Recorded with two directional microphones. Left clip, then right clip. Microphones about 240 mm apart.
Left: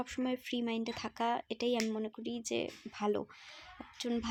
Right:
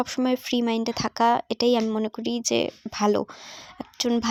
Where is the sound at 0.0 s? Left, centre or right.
Right.